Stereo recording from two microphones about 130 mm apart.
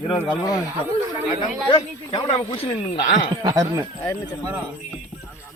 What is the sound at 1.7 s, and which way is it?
Speech, 40° left (ahead or behind).